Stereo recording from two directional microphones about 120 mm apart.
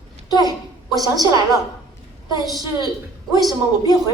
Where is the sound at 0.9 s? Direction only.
30° right (ahead or behind).